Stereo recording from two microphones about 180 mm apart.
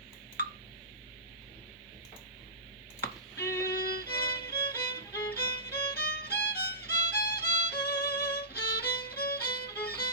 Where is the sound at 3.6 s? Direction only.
55° left (ahead or behind).